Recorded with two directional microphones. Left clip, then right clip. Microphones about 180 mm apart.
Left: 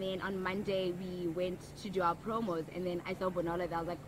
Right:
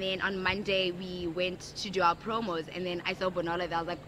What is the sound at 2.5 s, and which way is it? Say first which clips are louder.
Speech: right 3 dB; 30° right (ahead or behind).